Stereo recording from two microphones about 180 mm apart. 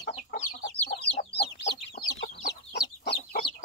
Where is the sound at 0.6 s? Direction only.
70° left (ahead or behind).